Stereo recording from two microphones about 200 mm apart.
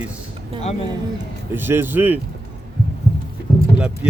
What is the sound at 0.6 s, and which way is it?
Speech, 30° left (ahead or behind).